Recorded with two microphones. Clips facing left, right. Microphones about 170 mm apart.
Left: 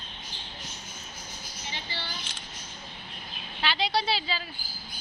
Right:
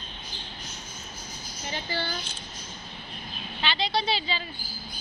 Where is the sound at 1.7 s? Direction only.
50° right (ahead or behind).